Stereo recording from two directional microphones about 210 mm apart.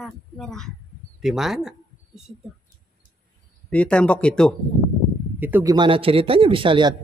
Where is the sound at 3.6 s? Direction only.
5° left (ahead or behind).